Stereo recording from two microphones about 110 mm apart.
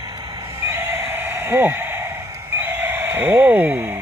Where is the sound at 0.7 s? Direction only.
20° right (ahead or behind).